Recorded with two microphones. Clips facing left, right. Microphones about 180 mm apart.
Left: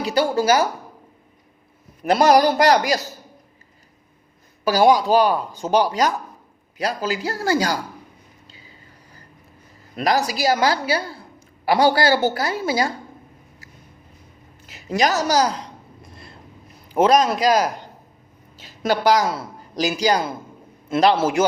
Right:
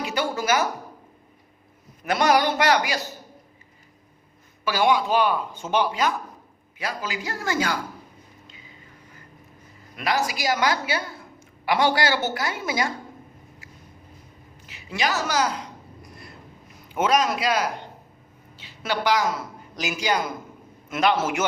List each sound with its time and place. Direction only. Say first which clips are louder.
0.0 s speech: left 7 dB; 35° left (ahead or behind)
2.0 s speech: left 6 dB; 35° left (ahead or behind)
4.6 s speech: left 6 dB; 40° left (ahead or behind)
8.4 s a sound: even; 35° left (ahead or behind)
9.9 s a woman's voice: left 5 dB; 40° left (ahead or behind)
14.7 s a sound: left 6 dB; 40° left (ahead or behind); by 16.3 s 25° left (ahead or behind)
16.9 s speech: left 6 dB; 35° left (ahead or behind)